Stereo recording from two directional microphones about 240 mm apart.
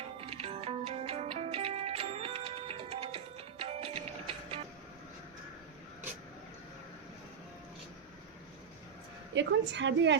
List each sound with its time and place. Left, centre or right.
0.2 s music: right
9.3 s a woman's voice: right